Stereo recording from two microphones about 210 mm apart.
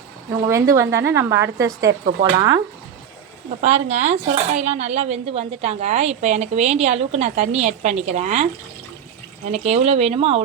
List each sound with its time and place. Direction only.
0.4 s a woman's voice: 15° right (ahead or behind)
3.6 s speech: 30° right (ahead or behind)
9.5 s speech: 30° right (ahead or behind)